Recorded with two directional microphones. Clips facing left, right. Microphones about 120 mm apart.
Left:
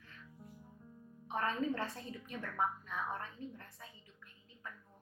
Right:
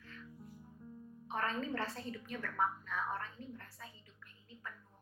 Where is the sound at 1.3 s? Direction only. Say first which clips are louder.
Left 2 dB; 15° left (ahead or behind).